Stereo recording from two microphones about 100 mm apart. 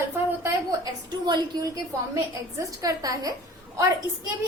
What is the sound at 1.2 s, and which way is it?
Speech, 45° right (ahead or behind).